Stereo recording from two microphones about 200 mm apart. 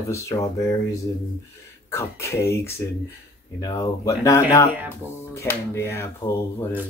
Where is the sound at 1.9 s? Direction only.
15° left (ahead or behind).